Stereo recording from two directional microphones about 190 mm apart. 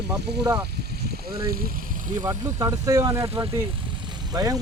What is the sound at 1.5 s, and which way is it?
Speech, 50° right (ahead or behind).